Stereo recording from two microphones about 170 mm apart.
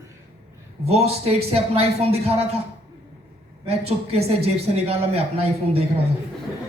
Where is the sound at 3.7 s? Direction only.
35° right (ahead or behind).